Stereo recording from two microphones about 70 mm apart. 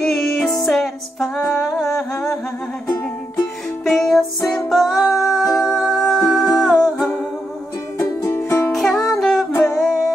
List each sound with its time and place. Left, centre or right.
0.0 s music: centre
3.8 s music: centre
8.3 s music: left
8.6 s music: centre